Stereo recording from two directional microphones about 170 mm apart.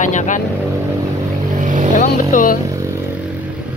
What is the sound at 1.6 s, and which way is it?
Vehicle, 50° right (ahead or behind).